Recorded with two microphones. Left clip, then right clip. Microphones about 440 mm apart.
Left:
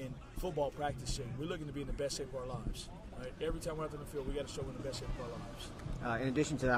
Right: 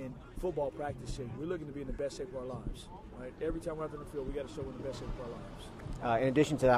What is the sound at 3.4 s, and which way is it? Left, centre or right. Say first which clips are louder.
Speech: right 2 dB; left.